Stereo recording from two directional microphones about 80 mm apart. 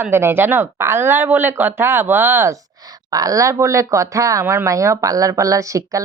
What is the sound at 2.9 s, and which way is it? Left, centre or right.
Speech, right.